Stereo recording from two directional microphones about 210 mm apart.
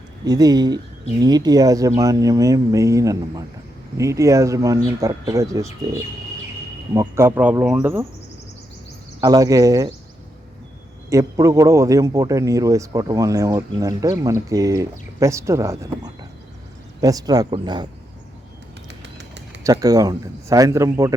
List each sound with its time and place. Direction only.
0.3 s a man's voice: 20° right (ahead or behind)
9.2 s a man's voice: 15° right (ahead or behind)
11.1 s a man's voice: 15° right (ahead or behind)
18.9 s bird: 55° right (ahead or behind)
19.6 s a man's voice: 15° right (ahead or behind)